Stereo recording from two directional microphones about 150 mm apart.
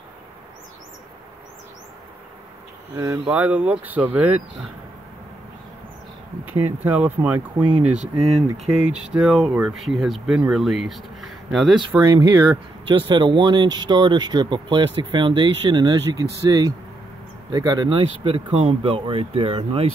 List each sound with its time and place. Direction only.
3.3 s speech: 10° right (ahead or behind)
6.4 s speech: 15° right (ahead or behind)
8.0 s speech: 50° right (ahead or behind)
8.8 s speech: 5° right (ahead or behind)
12.1 s speech: 30° right (ahead or behind)